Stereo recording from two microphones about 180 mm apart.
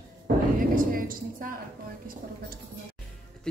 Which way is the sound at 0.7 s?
50° right (ahead or behind).